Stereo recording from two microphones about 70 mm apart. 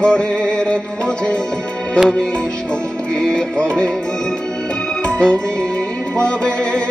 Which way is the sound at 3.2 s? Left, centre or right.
Centre.